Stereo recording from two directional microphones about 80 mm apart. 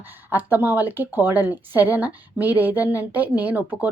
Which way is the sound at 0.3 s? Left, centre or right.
Right.